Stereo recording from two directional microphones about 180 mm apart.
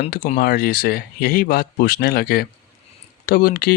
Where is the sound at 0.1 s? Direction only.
50° left (ahead or behind).